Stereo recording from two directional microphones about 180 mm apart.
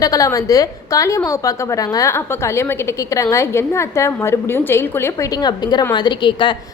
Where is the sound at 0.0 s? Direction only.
20° left (ahead or behind).